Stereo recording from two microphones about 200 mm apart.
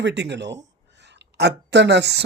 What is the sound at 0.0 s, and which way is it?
Speech, 60° right (ahead or behind).